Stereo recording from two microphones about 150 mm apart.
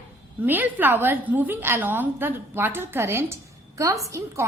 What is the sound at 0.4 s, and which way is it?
A woman's voice, 10° right (ahead or behind).